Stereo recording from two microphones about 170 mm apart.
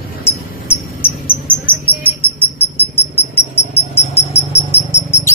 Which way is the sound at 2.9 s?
15° left (ahead or behind).